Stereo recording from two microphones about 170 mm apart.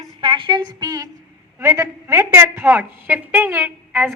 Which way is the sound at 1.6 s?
15° right (ahead or behind).